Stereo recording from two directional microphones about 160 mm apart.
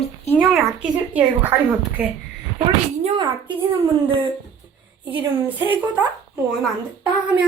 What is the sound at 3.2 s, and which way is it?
Speech, 25° right (ahead or behind).